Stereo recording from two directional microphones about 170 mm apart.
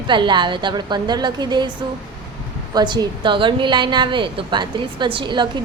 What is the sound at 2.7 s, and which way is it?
A woman's voice, 25° right (ahead or behind).